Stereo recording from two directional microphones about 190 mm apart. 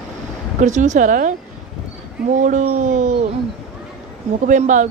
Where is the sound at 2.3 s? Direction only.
40° right (ahead or behind).